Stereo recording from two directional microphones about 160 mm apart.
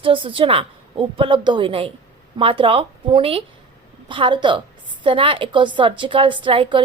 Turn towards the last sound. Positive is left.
turn(degrees=-30)  # may be behind; listen again after turning